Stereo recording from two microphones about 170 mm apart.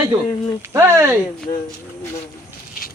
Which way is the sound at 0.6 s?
15° right (ahead or behind).